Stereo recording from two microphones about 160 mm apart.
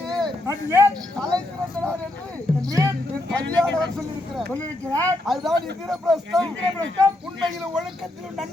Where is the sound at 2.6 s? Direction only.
20° right (ahead or behind).